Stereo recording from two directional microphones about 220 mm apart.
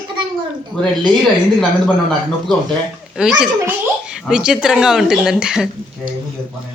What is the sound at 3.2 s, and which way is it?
A child's voice, 5° right (ahead or behind).